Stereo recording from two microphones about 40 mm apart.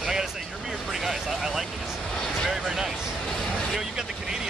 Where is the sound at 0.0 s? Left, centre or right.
Centre.